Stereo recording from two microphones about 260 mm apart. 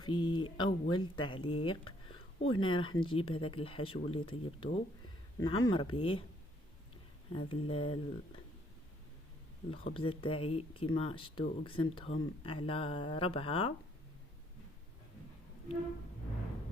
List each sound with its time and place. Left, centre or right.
0.0 s speech: centre
7.3 s speech: centre
9.7 s speech: centre